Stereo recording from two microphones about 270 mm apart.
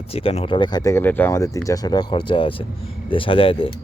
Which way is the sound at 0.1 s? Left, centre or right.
Left.